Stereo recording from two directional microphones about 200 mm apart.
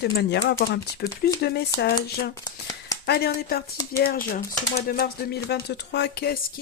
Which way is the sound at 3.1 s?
50° left (ahead or behind).